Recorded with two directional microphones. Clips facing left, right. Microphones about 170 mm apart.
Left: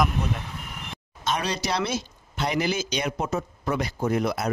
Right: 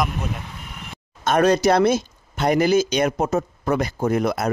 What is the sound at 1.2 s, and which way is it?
Speech, 50° right (ahead or behind).